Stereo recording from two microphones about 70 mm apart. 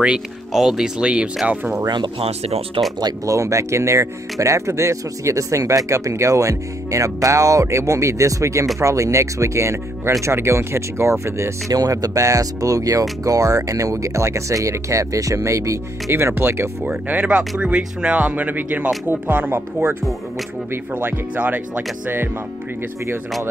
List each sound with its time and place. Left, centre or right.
0.0 s speech: centre
3.3 s speech: right
11.7 s speech: right
16.8 s speech: right
21.0 s speech: right